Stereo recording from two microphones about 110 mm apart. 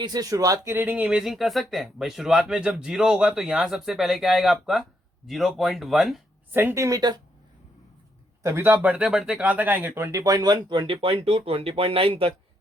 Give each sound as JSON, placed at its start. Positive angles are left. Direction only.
{"t": 0.0, "sound": "speech", "side_deg": -35}
{"t": 1.0, "sound": "speech", "side_deg": -5}
{"t": 6.5, "sound": "speech", "side_deg": -20}
{"t": 8.4, "sound": "speech", "side_deg": -20}